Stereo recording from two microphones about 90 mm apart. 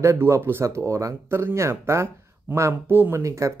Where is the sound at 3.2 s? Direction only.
35° right (ahead or behind).